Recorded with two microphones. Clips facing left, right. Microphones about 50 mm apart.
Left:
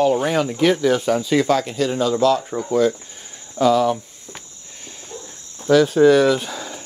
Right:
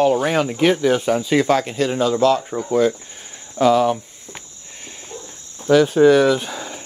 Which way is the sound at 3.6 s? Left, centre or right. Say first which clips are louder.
Right 1 dB; right.